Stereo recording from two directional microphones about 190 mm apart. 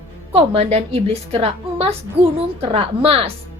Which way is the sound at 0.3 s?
30° right (ahead or behind).